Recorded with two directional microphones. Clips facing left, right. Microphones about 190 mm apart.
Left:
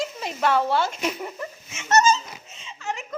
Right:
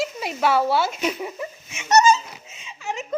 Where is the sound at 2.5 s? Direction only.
10° right (ahead or behind).